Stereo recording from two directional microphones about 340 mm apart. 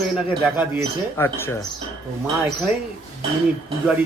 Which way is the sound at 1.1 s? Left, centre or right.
Centre.